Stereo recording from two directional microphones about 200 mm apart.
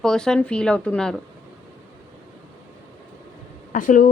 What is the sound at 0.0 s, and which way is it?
Speech, 5° left (ahead or behind).